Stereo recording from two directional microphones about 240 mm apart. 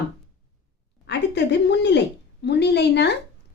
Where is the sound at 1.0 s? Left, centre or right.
Left.